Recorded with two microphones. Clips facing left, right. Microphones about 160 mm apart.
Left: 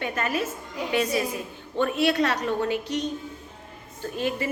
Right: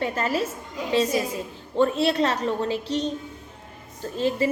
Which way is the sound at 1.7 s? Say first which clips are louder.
Right 2 dB; 30° right (ahead or behind).